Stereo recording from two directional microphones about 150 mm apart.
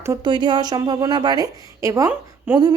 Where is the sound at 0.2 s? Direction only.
30° right (ahead or behind).